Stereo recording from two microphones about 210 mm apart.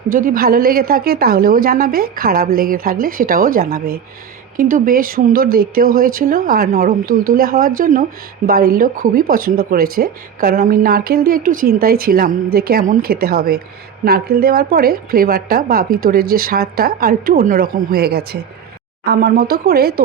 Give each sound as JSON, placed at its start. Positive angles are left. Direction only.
{"t": 0.1, "sound": "a woman's voice", "side_deg": -45}